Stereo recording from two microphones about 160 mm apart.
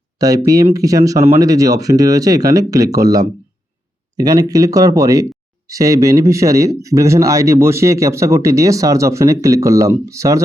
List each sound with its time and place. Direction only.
0.2 s speech: 20° right (ahead or behind)